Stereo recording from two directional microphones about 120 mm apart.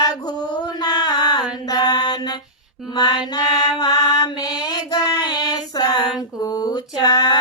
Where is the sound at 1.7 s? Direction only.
35° left (ahead or behind).